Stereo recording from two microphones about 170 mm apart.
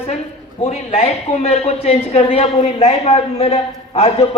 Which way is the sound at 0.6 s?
35° left (ahead or behind).